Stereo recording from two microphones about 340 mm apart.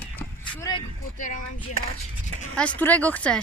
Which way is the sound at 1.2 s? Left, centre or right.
Left.